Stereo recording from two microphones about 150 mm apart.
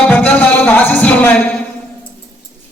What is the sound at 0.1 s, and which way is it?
Music, 10° left (ahead or behind).